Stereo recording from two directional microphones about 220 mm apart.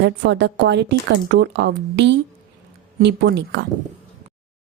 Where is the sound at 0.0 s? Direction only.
50° right (ahead or behind).